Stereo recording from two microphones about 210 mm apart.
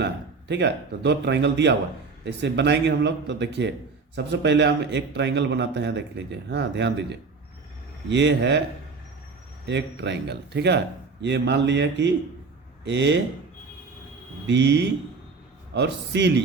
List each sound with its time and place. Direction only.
0.0 s a man's voice: 55° right (ahead or behind)
9.6 s a man's voice: 55° right (ahead or behind)
14.4 s a man's voice: 55° right (ahead or behind)